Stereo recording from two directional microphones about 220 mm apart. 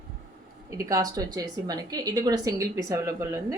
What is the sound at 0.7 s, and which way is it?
A woman's voice, 15° right (ahead or behind).